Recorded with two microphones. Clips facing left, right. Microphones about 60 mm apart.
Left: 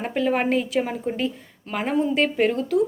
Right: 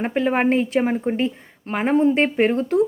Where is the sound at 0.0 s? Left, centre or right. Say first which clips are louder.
Right 3 dB; right.